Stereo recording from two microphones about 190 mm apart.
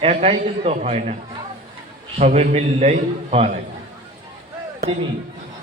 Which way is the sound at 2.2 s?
35° right (ahead or behind).